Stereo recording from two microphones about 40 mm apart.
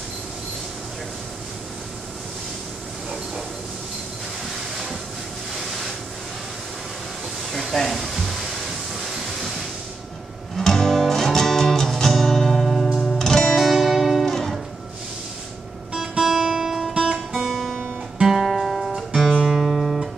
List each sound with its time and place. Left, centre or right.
4.5 s waves: centre
5.6 s a sound: centre
7.5 s hair dryer: centre
10.5 s music: centre
16.0 s guitar: centre
16.9 s music: centre
17.3 s guitar: centre
18.5 s music: centre